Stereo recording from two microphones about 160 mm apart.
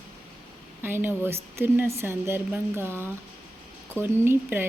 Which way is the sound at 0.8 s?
15° right (ahead or behind).